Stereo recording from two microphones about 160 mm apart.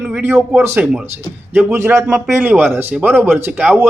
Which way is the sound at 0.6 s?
10° right (ahead or behind).